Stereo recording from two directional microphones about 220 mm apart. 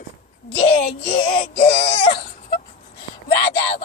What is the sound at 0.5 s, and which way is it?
Speech, 25° left (ahead or behind).